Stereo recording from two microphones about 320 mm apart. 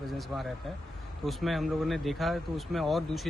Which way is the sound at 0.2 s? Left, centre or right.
Centre.